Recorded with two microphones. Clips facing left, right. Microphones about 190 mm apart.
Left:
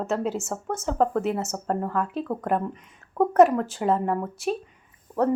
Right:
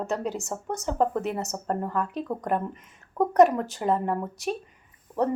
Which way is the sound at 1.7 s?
Centre (ahead or behind).